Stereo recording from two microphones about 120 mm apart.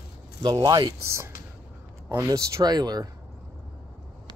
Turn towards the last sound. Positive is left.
turn(degrees=-35)  # may be behind; listen again after turning